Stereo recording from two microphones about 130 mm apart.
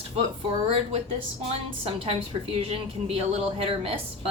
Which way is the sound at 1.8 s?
45° right (ahead or behind).